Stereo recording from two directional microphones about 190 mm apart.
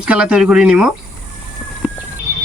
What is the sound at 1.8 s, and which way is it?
Horse, 5° right (ahead or behind).